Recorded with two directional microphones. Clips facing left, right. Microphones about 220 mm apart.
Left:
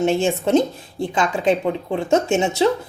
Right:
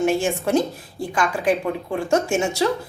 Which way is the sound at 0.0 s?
25° left (ahead or behind).